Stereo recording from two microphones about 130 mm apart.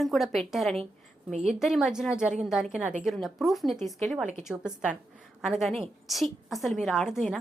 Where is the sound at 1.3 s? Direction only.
60° right (ahead or behind).